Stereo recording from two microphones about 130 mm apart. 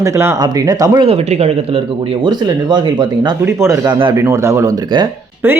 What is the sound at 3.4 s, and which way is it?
Speech, 20° right (ahead or behind).